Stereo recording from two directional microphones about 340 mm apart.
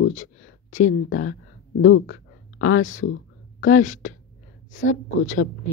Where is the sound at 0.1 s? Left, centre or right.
Left.